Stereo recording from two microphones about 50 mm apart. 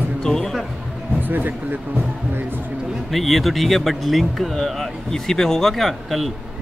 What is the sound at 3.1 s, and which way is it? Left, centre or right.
Speech, centre.